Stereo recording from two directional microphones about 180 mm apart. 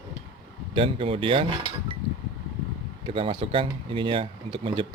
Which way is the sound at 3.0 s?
30° right (ahead or behind).